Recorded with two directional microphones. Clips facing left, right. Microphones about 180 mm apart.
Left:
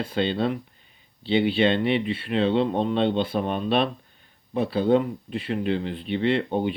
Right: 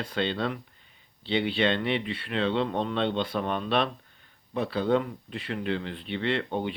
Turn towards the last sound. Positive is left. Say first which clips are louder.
# left 5 dB
turn(degrees=15)  # may be behind; listen again after turning